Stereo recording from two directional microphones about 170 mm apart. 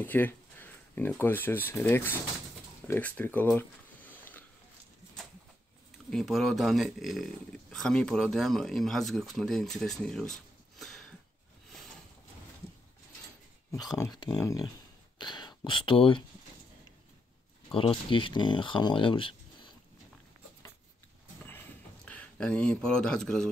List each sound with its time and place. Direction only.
0.0 s speech: 10° left (ahead or behind)
2.9 s a sound: 10° left (ahead or behind)
6.0 s speech: centre (ahead or behind)
13.7 s speech: 20° left (ahead or behind)
15.1 s a sound: 25° left (ahead or behind)
17.6 s speech: 30° left (ahead or behind)
22.0 s speech: 5° left (ahead or behind)